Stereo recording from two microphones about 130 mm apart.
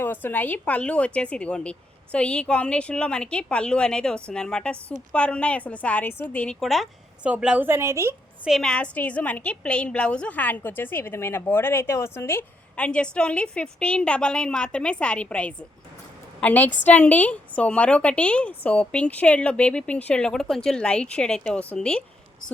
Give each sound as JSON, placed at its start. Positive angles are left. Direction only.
{"t": 0.0, "sound": "a woman's voice", "side_deg": 15}
{"t": 8.4, "sound": "a woman's voice", "side_deg": 5}